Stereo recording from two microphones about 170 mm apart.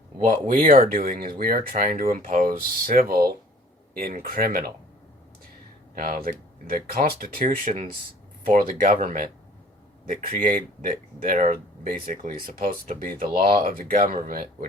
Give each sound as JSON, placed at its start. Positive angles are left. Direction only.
{"t": 0.4, "sound": "speech", "side_deg": -55}
{"t": 5.9, "sound": "speech", "side_deg": -60}